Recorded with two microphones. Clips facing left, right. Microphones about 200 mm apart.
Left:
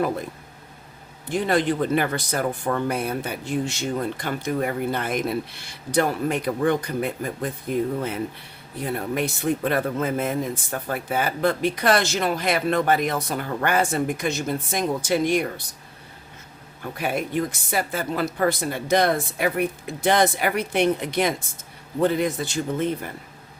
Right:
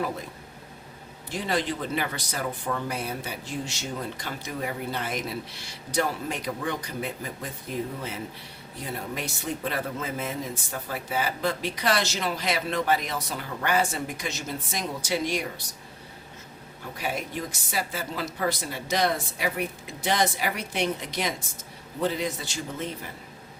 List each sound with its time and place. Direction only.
1.3 s speech: 55° left (ahead or behind)
8.8 s speech: 55° left (ahead or behind)
17.0 s speech: 55° left (ahead or behind)